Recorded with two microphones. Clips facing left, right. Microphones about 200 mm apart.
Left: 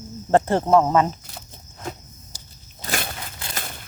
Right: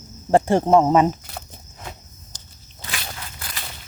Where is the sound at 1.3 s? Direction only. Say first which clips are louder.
Right 5 dB; 65° right (ahead or behind).